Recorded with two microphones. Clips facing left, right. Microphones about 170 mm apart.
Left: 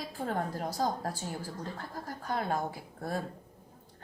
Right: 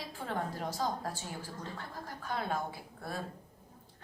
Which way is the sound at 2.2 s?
40° left (ahead or behind).